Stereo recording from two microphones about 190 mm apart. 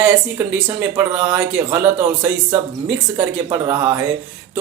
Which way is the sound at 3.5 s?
10° right (ahead or behind).